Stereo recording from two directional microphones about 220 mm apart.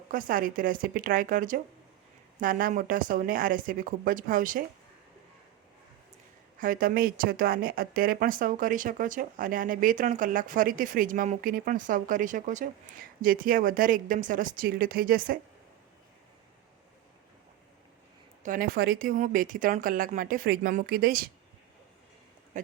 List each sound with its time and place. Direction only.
0.1 s speech: 40° right (ahead or behind)
6.6 s speech: 40° right (ahead or behind)
18.4 s speech: 40° right (ahead or behind)
22.5 s speech: 35° right (ahead or behind)